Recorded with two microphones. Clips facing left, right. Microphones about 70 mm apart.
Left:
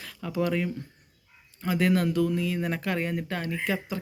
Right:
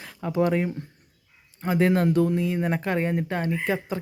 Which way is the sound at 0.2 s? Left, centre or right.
Right.